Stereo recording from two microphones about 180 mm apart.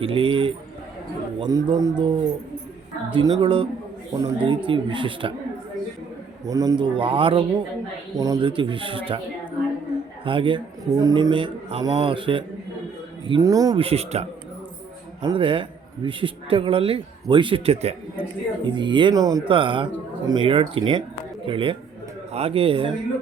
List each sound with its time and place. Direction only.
0.0 s a man's voice: 30° right (ahead or behind)
6.4 s a man's voice: 20° right (ahead or behind)
10.2 s a man's voice: 30° right (ahead or behind)
13.7 s a man's voice: 35° right (ahead or behind)
15.2 s a man's voice: 25° right (ahead or behind)